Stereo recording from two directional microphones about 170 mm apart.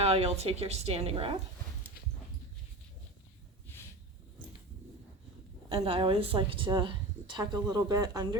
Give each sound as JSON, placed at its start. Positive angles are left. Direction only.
{"t": 0.0, "sound": "a woman's voice", "side_deg": -35}
{"t": 5.6, "sound": "speech", "side_deg": -35}